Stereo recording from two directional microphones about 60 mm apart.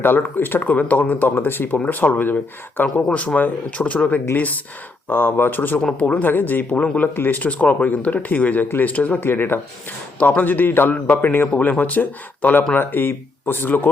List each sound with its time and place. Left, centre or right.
0.0 s speech: left
9.2 s speech: left